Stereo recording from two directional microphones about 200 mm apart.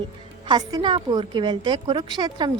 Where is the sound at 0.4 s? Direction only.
20° right (ahead or behind).